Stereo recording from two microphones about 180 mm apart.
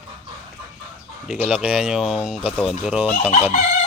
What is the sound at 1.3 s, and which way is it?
Speech, 5° right (ahead or behind).